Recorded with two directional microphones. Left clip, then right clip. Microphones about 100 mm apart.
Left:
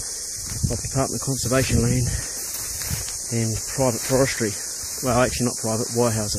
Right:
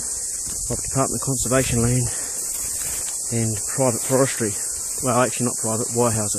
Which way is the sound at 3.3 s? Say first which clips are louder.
Right 1 dB; 25° right (ahead or behind).